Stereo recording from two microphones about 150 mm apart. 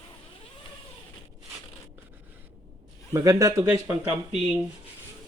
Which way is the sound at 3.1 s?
20° right (ahead or behind).